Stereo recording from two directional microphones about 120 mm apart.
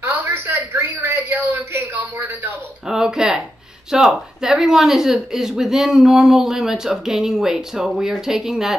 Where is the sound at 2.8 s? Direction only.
5° right (ahead or behind).